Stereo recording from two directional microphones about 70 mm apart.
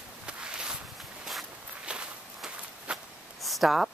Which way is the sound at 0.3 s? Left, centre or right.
Centre.